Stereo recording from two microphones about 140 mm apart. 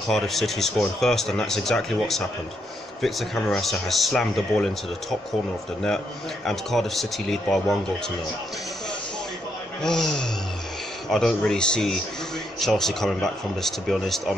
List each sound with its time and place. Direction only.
0.1 s speech: centre (ahead or behind)
6.4 s speech: centre (ahead or behind)
9.8 s speech: 5° left (ahead or behind)